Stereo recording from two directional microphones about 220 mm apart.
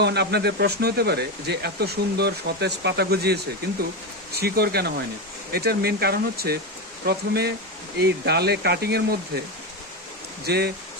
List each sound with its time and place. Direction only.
0.0 s speech: 50° right (ahead or behind)
10.4 s speech: 45° right (ahead or behind)